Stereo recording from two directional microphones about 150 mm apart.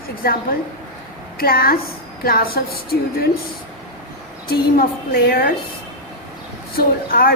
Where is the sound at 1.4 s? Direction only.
85° left.